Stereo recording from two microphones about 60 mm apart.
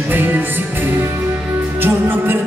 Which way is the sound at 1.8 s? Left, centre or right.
Right.